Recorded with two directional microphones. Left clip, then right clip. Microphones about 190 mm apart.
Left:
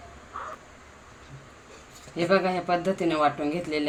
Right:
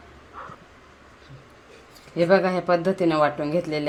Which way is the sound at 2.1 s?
40° right (ahead or behind).